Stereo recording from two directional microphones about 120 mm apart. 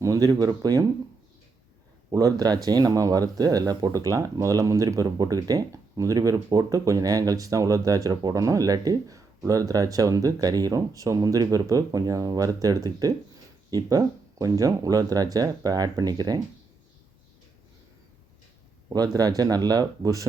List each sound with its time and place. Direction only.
0.0 s speech: 30° right (ahead or behind)
2.0 s speech: 30° right (ahead or behind)
18.9 s speech: 30° right (ahead or behind)